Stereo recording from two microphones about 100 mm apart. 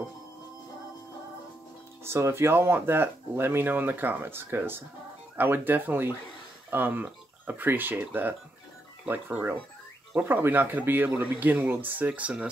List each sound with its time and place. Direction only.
2.0 s speech: 25° right (ahead or behind)